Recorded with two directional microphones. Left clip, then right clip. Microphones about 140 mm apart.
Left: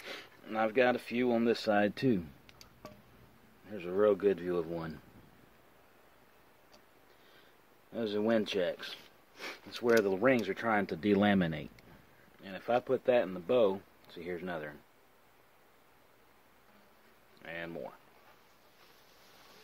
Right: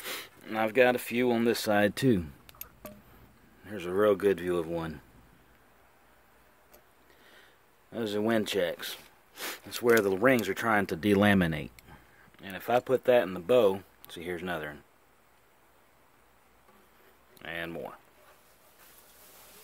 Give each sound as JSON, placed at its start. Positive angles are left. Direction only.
{"t": 0.0, "sound": "speech", "side_deg": -75}
{"t": 3.6, "sound": "speech", "side_deg": -90}
{"t": 7.9, "sound": "speech", "side_deg": -55}
{"t": 17.4, "sound": "speech", "side_deg": -85}